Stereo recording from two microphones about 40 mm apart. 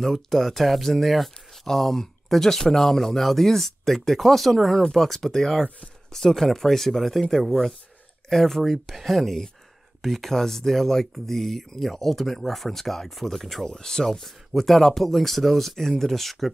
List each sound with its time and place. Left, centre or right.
0.0 s speech: centre
13.7 s speech: centre
14.2 s speech: centre